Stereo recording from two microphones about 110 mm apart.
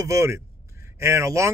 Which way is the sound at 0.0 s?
25° right (ahead or behind).